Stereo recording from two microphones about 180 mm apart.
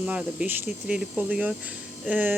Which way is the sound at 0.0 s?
5° right (ahead or behind).